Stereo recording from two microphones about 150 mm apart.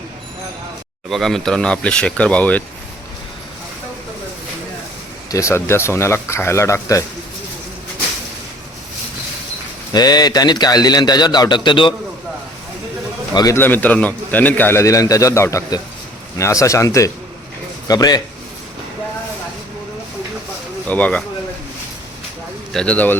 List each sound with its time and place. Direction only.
1.1 s a man's voice: 5° left (ahead or behind)
5.3 s a man's voice: 20° left (ahead or behind)
9.9 s a man's voice: 25° left (ahead or behind)
13.3 s a man's voice: 25° left (ahead or behind)
13.6 s a man's voice: 10° left (ahead or behind)
20.8 s a man's voice: 10° left (ahead or behind)
22.7 s a man's voice: 5° left (ahead or behind)